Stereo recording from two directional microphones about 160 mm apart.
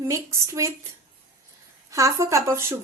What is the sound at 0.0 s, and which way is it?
Speech, 20° right (ahead or behind).